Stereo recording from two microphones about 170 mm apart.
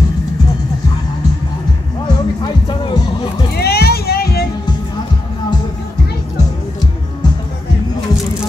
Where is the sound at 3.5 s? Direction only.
70° left (ahead or behind).